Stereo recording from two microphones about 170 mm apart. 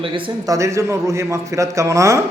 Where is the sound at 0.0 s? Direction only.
30° right (ahead or behind).